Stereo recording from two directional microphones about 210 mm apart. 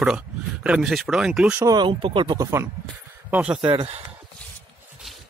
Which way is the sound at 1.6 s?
20° right (ahead or behind).